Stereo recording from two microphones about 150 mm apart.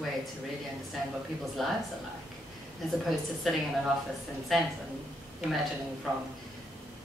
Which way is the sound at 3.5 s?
Centre (ahead or behind).